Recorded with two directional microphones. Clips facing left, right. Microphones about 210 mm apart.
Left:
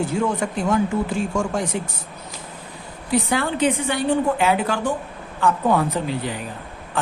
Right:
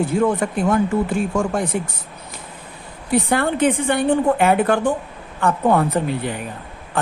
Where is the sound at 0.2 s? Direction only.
55° right (ahead or behind).